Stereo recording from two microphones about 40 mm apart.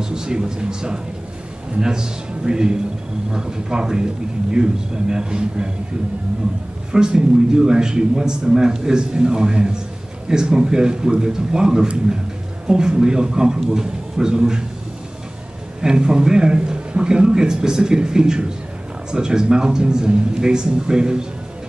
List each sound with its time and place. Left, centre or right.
0.0 s a man's voice: centre
6.9 s a man's voice: centre
15.8 s a man's voice: centre